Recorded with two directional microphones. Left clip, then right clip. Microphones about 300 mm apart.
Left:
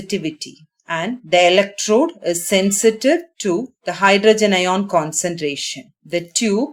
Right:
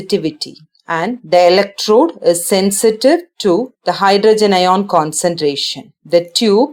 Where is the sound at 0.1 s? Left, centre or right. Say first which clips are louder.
Right 7 dB; centre.